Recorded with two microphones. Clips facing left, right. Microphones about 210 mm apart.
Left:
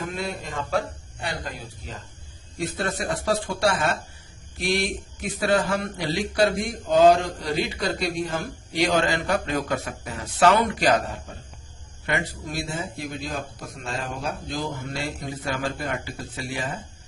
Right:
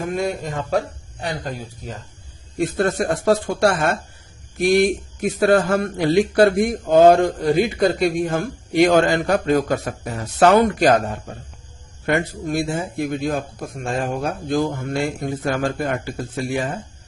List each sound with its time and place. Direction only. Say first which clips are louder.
0.0 s a man's voice: right 7 dB; 45° right (ahead or behind)